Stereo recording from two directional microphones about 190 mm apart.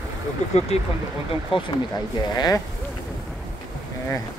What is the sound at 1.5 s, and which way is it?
Speech, 30° left (ahead or behind).